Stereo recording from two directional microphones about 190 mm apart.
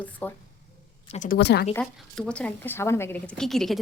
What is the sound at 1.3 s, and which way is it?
Speech, 60° left (ahead or behind).